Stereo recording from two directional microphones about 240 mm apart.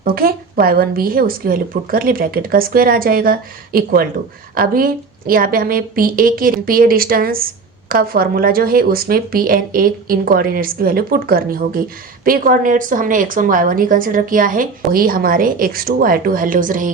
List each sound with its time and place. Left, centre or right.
0.0 s a woman's voice: right